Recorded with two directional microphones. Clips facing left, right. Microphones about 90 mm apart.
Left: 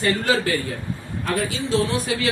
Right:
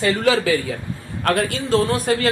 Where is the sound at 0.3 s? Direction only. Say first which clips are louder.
Right 4 dB; 90° right.